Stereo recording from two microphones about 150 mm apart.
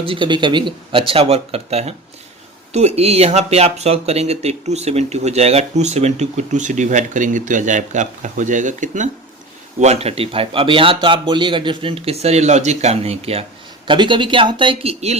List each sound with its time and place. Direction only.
0.1 s a man's voice: 30° right (ahead or behind); by 9.0 s 55° right (ahead or behind)
9.8 s a man's voice: 45° right (ahead or behind)